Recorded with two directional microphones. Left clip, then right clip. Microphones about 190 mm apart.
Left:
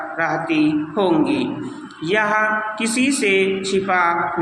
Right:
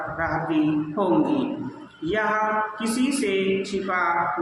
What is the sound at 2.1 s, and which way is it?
Speech, 25° left (ahead or behind).